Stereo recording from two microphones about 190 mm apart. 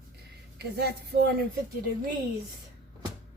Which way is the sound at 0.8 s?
55° right (ahead or behind).